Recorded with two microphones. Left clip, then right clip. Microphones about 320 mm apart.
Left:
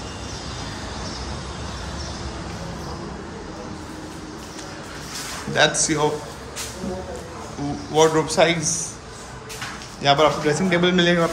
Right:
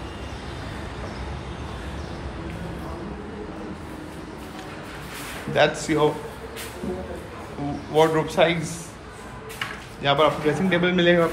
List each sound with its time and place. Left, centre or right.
5.5 s a man's voice: centre
7.9 s a man's voice: centre
8.5 s a man's voice: centre
10.0 s a man's voice: centre